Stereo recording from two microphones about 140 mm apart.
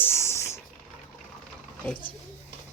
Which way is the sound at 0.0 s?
20° left (ahead or behind).